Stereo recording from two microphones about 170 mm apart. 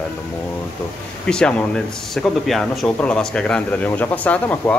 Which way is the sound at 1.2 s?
5° left (ahead or behind).